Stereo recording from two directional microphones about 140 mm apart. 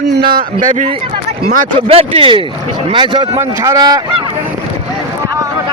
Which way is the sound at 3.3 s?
20° right (ahead or behind).